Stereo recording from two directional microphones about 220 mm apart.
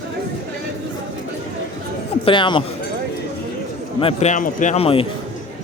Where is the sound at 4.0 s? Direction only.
30° left (ahead or behind).